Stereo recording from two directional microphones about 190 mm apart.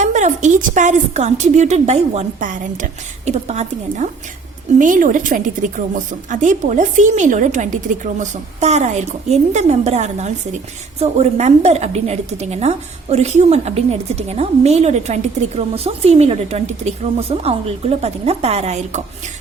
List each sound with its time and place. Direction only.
0.0 s a woman's voice: 40° right (ahead or behind)